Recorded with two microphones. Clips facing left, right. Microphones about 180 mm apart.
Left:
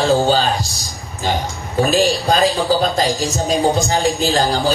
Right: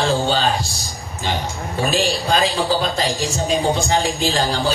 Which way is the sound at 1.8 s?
40° left (ahead or behind).